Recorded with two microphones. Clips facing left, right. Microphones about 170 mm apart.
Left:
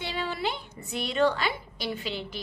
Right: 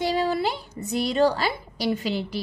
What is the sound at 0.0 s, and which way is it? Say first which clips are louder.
A woman's voice: right 8 dB; 40° right (ahead or behind).